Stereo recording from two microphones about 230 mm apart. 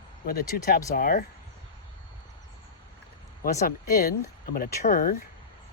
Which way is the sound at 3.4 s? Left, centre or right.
Left.